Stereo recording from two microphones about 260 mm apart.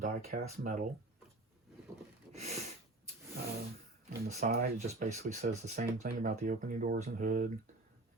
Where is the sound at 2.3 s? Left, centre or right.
Right.